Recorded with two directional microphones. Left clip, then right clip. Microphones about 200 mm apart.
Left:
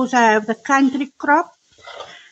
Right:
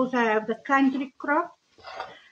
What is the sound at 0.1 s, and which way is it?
Speech, 60° left (ahead or behind).